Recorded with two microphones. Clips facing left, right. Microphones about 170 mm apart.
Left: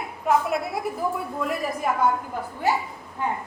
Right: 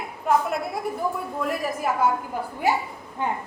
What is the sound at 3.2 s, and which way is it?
Speech, 20° right (ahead or behind).